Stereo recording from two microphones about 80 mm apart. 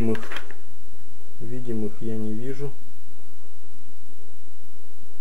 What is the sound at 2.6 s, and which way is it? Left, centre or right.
Speech, centre.